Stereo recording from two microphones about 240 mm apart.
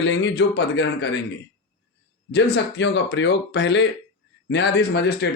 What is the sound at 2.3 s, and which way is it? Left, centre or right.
Speech, left.